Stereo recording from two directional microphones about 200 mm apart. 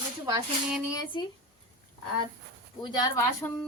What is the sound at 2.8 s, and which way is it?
Speech, 15° left (ahead or behind).